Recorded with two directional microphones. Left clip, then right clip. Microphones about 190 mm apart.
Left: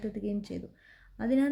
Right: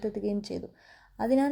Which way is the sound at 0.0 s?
15° right (ahead or behind).